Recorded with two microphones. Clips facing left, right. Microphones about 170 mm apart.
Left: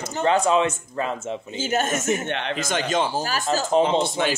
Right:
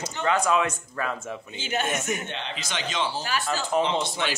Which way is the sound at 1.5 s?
40° left (ahead or behind).